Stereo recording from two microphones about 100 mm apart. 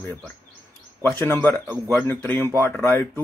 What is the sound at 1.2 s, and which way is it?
Speech, 20° left (ahead or behind).